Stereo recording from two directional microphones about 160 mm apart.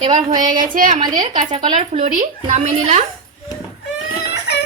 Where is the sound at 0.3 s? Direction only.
55° right (ahead or behind).